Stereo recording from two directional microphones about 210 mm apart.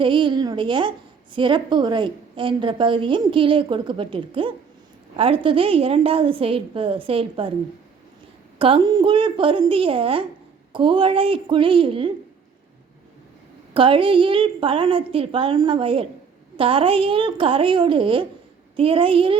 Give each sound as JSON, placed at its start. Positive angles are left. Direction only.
{"t": 0.0, "sound": "a woman's voice", "side_deg": -25}
{"t": 8.5, "sound": "a woman's voice", "side_deg": -25}
{"t": 13.7, "sound": "a woman's voice", "side_deg": -25}